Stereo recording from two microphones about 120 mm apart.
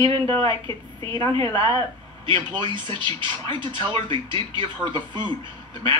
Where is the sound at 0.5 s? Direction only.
45° right (ahead or behind).